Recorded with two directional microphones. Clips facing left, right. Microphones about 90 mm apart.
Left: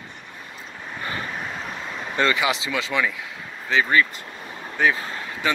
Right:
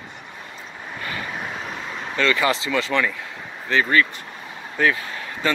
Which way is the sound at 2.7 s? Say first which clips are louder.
Right 2 dB; 5° left (ahead or behind).